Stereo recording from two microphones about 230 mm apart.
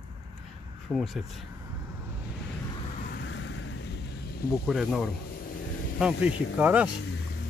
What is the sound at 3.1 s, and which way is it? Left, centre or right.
Vehicle, left.